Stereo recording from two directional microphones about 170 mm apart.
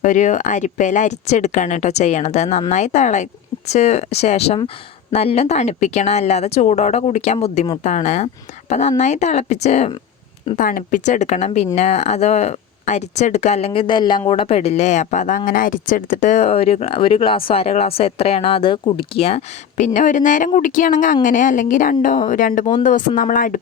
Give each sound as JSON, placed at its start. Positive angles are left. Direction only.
{"t": 0.0, "sound": "speech", "side_deg": 45}
{"t": 10.6, "sound": "speech", "side_deg": 55}